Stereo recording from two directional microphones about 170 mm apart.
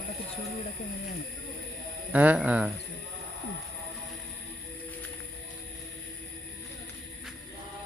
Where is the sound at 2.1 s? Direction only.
10° right (ahead or behind).